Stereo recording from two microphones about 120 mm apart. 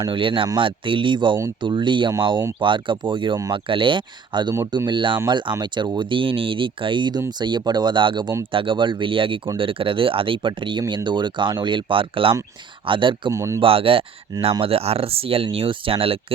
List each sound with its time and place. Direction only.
0.0 s speech: 45° right (ahead or behind)
4.5 s speech: 25° right (ahead or behind); by 13.3 s 45° right (ahead or behind)
13.3 s speech: 25° right (ahead or behind)
13.6 s speech: 50° right (ahead or behind)